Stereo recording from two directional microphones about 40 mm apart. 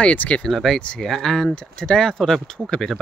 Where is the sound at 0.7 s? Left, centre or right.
Left.